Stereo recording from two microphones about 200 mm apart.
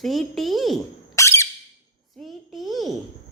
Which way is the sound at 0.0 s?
Centre (ahead or behind).